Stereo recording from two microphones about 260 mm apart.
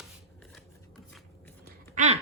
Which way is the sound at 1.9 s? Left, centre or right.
Right.